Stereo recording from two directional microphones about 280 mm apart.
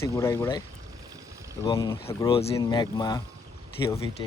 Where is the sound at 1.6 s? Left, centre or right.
Centre.